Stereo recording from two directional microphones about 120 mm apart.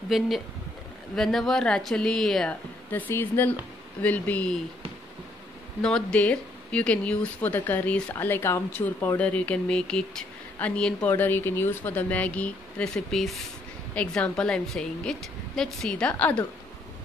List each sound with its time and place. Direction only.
0.1 s speech: centre (ahead or behind)
2.9 s speech: 15° left (ahead or behind)
5.8 s speech: 5° left (ahead or behind)